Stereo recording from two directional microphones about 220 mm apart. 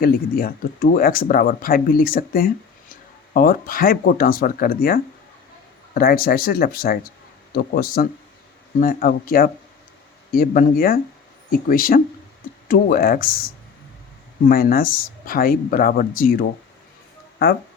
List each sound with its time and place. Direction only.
0.0 s speech: 40° left (ahead or behind)
14.4 s speech: 40° left (ahead or behind)